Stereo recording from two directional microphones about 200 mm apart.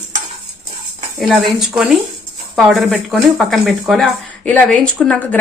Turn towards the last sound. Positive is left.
turn(degrees=10)  # may be behind; listen again after turning